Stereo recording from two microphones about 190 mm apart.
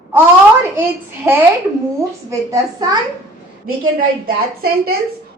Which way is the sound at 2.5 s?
20° right (ahead or behind).